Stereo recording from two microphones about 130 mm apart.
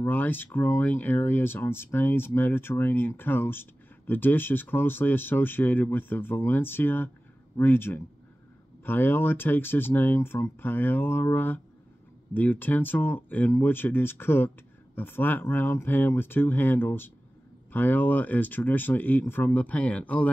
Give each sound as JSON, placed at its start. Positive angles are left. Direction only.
{"t": 0.0, "sound": "speech", "side_deg": 15}